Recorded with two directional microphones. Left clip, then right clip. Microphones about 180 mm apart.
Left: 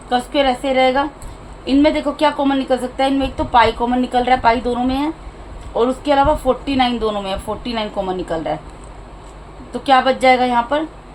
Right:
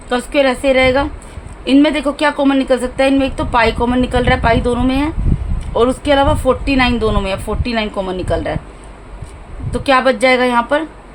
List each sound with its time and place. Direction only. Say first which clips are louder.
0.1 s a woman's voice: right 2 dB; 40° right (ahead or behind)
9.7 s a woman's voice: right 1 dB; 40° right (ahead or behind)